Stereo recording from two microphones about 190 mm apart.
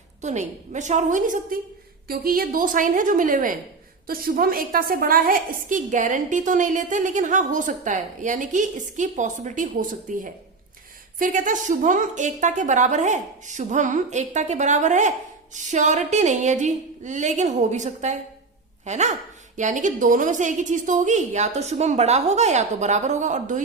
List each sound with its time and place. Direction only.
0.2 s a woman's voice: 40° right (ahead or behind)